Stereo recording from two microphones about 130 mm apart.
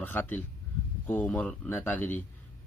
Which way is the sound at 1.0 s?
10° left (ahead or behind).